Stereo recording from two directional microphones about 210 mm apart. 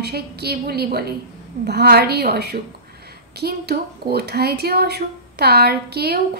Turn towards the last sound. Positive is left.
turn(degrees=-50)  # may be behind; listen again after turning